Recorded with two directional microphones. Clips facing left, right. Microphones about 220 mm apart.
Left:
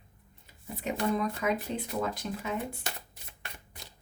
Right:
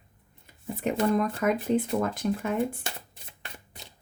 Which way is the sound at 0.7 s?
50° right (ahead or behind).